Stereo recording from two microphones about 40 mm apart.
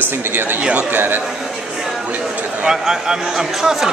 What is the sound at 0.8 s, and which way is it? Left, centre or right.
Speech, right.